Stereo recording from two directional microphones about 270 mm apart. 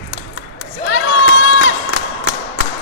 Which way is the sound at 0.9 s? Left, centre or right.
Left.